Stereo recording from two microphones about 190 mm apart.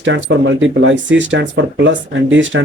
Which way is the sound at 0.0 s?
75° right (ahead or behind).